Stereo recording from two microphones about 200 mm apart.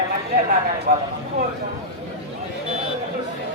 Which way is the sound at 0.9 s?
45° right (ahead or behind).